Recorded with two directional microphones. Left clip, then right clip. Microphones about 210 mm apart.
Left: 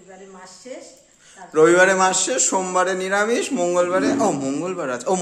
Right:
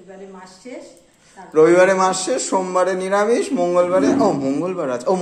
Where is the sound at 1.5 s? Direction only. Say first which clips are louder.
Right 2 dB; 15° left (ahead or behind).